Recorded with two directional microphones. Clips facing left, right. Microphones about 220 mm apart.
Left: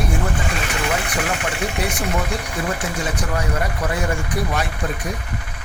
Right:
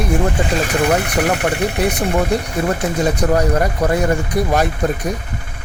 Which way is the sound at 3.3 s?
40° right (ahead or behind).